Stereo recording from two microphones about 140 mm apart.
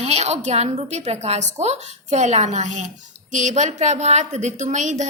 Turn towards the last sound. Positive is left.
turn(degrees=-60)  # may be behind; listen again after turning